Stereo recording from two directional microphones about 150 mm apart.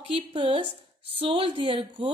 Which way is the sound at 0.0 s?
35° right (ahead or behind).